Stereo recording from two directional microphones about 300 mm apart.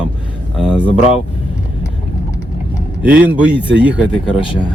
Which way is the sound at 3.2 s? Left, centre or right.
Centre.